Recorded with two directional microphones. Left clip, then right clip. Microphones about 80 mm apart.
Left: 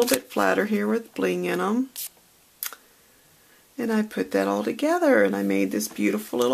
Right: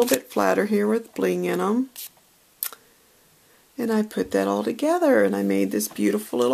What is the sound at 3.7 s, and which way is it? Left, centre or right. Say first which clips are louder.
Speech: right 2 dB; right.